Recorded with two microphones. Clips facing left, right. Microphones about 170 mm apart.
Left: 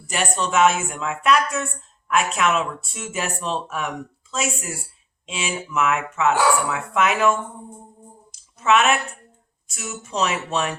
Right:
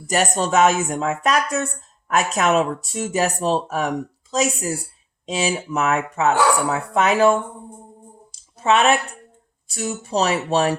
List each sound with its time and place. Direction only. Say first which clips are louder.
0.1 s speech: right 4 dB; 40° right (ahead or behind)
8.3 s a sound: even; 30° right (ahead or behind)
9.6 s speech: right 7 dB; 35° right (ahead or behind)